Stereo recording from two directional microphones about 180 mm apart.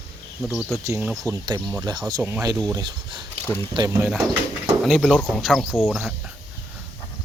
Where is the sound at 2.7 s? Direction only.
25° right (ahead or behind).